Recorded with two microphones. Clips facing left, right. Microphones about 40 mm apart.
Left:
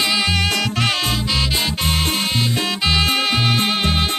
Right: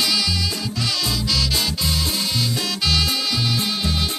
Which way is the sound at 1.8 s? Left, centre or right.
Left.